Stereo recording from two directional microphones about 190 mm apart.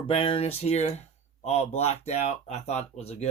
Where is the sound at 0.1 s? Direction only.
30° left (ahead or behind).